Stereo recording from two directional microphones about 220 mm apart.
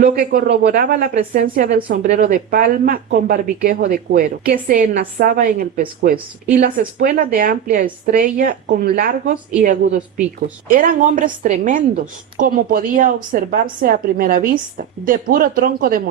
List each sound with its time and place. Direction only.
0.0 s speech: 40° right (ahead or behind)
10.7 s speech: 40° right (ahead or behind)